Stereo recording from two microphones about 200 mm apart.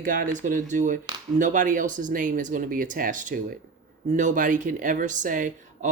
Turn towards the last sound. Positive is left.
turn(degrees=-40)  # may be behind; listen again after turning